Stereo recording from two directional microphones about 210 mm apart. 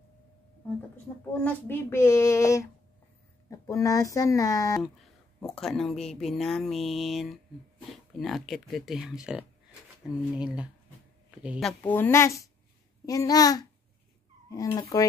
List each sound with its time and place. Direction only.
1.4 s speech: 10° left (ahead or behind)
5.5 s speech: centre (ahead or behind)
11.8 s speech: 10° left (ahead or behind)